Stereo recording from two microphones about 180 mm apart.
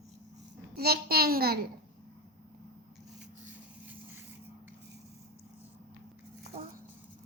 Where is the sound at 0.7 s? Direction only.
60° right (ahead or behind).